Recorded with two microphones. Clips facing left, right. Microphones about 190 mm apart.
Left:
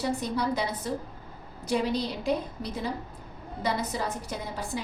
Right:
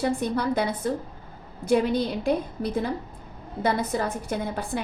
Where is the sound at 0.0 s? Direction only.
55° right (ahead or behind).